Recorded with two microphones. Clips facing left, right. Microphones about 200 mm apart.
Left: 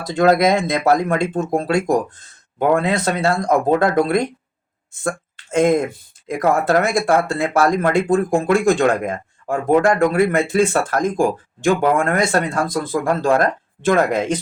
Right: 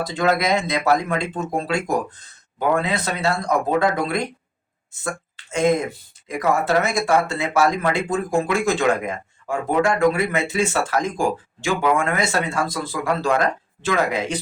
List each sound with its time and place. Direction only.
0.1 s speech: 50° left (ahead or behind)